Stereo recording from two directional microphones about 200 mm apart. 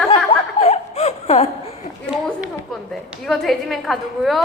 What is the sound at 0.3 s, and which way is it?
Snicker, 30° left (ahead or behind).